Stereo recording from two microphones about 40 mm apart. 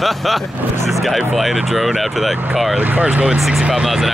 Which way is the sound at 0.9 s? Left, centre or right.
Centre.